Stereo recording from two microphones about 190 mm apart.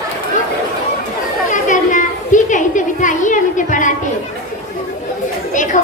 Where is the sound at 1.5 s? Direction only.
40° left (ahead or behind).